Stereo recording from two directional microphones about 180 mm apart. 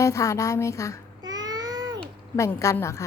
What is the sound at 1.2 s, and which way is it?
Babbling, 20° right (ahead or behind).